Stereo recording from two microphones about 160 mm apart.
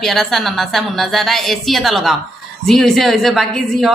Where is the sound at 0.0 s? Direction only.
Centre (ahead or behind).